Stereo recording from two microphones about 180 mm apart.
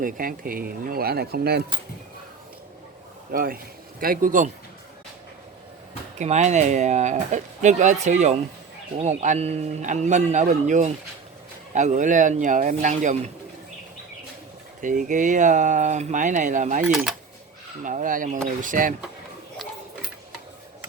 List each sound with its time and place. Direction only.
0.0 s speech: 50° right (ahead or behind)
3.3 s speech: 55° right (ahead or behind)
6.1 s a man's voice: 40° right (ahead or behind)
14.8 s speech: 45° right (ahead or behind)
16.9 s speech: centre (ahead or behind)
17.8 s speech: 45° right (ahead or behind)